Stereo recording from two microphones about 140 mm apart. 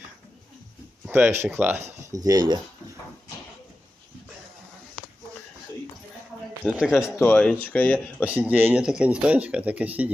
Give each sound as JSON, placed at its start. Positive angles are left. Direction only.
{"t": 1.1, "sound": "speech", "side_deg": -15}
{"t": 2.1, "sound": "speech", "side_deg": -25}
{"t": 6.6, "sound": "speech", "side_deg": -5}
{"t": 7.2, "sound": "speech", "side_deg": 10}
{"t": 8.2, "sound": "speech", "side_deg": -10}